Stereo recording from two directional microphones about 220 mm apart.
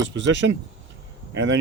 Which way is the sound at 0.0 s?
55° right (ahead or behind).